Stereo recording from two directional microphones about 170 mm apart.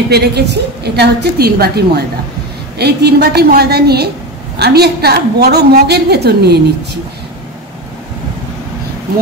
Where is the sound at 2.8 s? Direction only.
70° right (ahead or behind).